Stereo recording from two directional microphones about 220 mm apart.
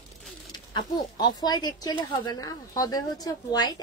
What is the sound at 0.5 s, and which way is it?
Speech, 20° left (ahead or behind).